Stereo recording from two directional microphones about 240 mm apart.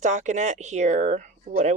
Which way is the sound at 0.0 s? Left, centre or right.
Right.